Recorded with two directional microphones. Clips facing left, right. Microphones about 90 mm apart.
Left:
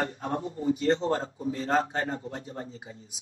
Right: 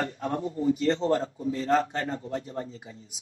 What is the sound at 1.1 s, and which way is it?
A man's voice, 30° left (ahead or behind).